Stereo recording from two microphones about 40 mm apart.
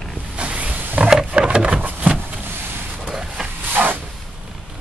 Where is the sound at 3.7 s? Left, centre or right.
Right.